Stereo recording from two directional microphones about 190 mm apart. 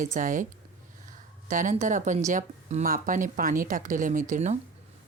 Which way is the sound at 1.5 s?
45° right (ahead or behind).